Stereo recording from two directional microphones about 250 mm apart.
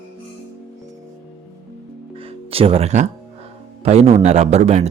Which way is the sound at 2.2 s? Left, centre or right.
Right.